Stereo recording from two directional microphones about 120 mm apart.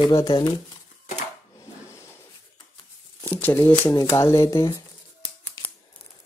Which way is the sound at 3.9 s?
25° left (ahead or behind).